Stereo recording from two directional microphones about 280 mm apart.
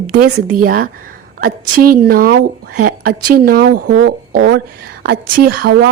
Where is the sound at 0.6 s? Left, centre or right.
Right.